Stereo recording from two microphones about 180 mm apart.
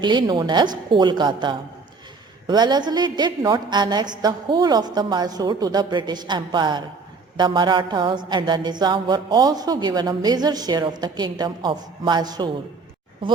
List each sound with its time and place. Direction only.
0.0 s a woman's voice: 25° right (ahead or behind)